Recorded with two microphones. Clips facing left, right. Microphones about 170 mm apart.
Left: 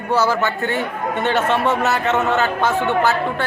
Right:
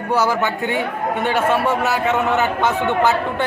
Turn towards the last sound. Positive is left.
turn(degrees=-20)  # may be behind; listen again after turning